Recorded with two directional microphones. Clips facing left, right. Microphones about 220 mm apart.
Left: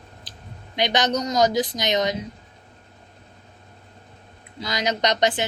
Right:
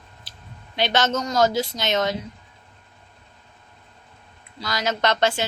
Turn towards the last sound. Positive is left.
turn(degrees=20)  # may be behind; listen again after turning